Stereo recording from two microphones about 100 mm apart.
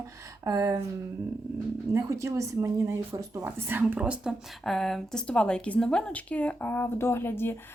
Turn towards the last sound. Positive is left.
turn(degrees=20)  # may be behind; listen again after turning